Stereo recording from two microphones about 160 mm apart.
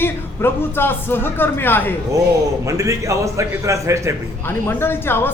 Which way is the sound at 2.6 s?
20° right (ahead or behind).